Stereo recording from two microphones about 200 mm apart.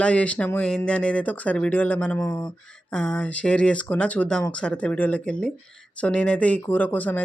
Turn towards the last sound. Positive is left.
turn(degrees=10)  # may be behind; listen again after turning